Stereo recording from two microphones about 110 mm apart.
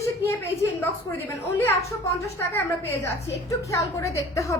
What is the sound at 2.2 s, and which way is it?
A woman's voice, 25° left (ahead or behind).